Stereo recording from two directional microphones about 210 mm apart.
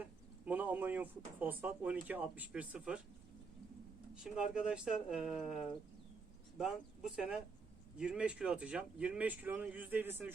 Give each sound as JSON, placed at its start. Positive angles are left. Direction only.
{"t": 0.0, "sound": "speech", "side_deg": -5}
{"t": 4.1, "sound": "speech", "side_deg": -5}